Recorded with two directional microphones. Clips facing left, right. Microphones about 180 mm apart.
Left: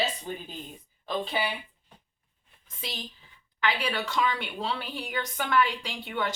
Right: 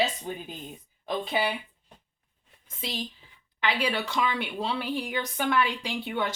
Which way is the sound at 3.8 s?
10° right (ahead or behind).